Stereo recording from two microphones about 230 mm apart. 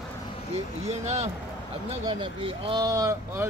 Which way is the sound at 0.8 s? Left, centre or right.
Right.